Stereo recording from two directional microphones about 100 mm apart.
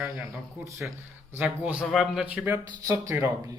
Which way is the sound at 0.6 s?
15° right (ahead or behind).